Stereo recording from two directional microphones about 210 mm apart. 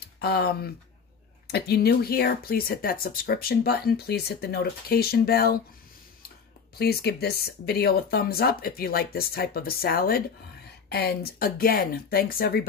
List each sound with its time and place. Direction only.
0.2 s speech: 45° left (ahead or behind)
6.8 s speech: 50° left (ahead or behind)